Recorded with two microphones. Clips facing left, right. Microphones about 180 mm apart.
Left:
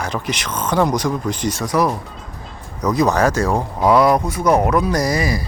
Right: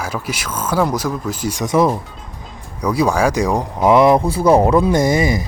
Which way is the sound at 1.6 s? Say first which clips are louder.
Right 4 dB; 25° right (ahead or behind).